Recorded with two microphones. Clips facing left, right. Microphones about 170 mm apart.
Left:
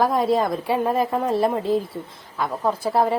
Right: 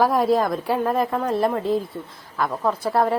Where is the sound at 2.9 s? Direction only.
Centre (ahead or behind).